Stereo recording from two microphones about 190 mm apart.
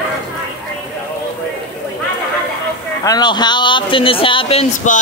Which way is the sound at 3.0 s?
20° left (ahead or behind).